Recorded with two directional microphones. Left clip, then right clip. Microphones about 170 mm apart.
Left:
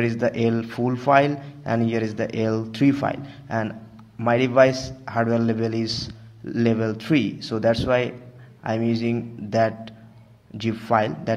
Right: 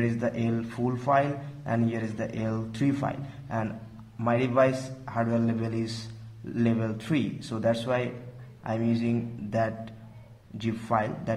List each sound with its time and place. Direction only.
0.0 s a man's voice: 30° left (ahead or behind)